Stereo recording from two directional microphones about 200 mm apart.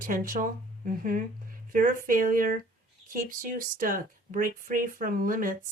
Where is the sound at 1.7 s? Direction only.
40° right (ahead or behind).